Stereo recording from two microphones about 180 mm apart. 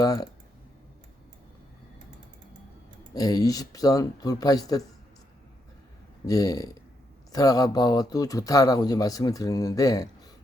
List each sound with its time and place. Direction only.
0.0 s speech: 20° left (ahead or behind)
3.2 s speech: 20° left (ahead or behind)
6.2 s speech: 20° left (ahead or behind)